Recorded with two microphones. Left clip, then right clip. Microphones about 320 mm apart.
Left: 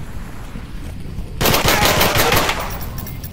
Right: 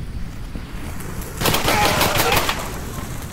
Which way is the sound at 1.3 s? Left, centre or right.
Centre.